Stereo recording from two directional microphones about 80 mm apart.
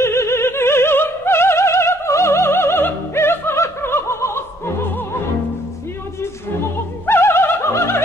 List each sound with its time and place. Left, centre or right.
0.0 s opera: left
7.1 s opera: left